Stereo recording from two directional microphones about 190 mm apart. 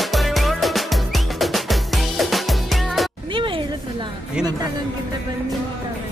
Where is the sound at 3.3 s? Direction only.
25° right (ahead or behind).